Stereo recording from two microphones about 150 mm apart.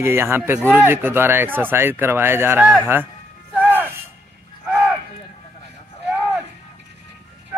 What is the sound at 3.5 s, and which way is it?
Music, 10° right (ahead or behind).